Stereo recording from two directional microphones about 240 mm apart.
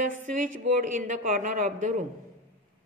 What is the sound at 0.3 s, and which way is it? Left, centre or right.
A man's voice, right.